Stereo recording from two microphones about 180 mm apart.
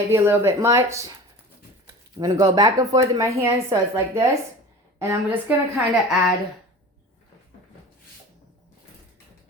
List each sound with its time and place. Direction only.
0.1 s speech: 15° right (ahead or behind)
2.1 s speech: 20° right (ahead or behind); by 6.1 s 5° right (ahead or behind)